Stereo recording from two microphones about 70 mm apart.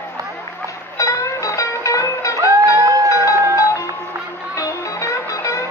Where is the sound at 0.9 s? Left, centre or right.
Left.